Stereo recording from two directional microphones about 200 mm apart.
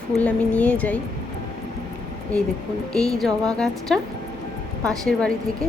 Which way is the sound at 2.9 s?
Centre (ahead or behind).